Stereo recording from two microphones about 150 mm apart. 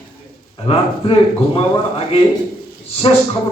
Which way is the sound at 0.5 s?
35° left (ahead or behind).